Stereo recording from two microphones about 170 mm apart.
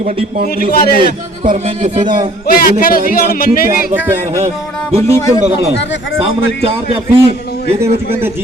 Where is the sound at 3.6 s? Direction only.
10° right (ahead or behind).